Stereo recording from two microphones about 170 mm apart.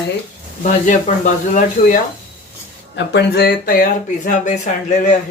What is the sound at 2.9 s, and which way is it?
Speech, 80° left.